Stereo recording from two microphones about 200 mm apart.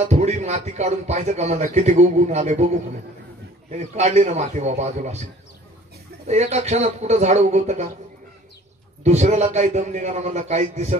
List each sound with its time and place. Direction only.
0.0 s speech: 35° right (ahead or behind)
6.2 s speech: 35° right (ahead or behind)
9.0 s speech: 35° right (ahead or behind)